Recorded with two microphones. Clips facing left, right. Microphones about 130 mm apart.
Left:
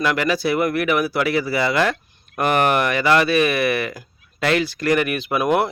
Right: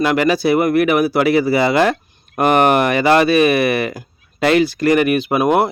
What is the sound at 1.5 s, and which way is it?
Speech, 30° right (ahead or behind).